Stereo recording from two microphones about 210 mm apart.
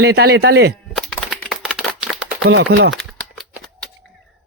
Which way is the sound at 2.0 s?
5° right (ahead or behind).